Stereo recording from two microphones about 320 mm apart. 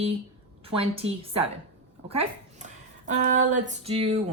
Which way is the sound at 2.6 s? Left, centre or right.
Right.